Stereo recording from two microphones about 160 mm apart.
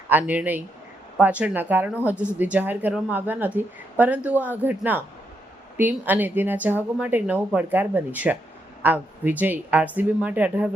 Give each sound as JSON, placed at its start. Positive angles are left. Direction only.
{"t": 0.1, "sound": "speech", "side_deg": -10}